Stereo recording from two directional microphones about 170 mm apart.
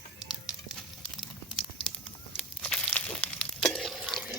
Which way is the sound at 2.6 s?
5° left (ahead or behind).